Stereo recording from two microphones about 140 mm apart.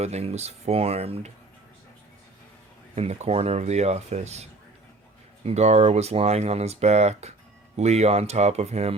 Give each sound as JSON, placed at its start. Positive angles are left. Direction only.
{"t": 0.0, "sound": "speech", "side_deg": -50}
{"t": 2.9, "sound": "speech", "side_deg": -50}
{"t": 5.5, "sound": "speech", "side_deg": -50}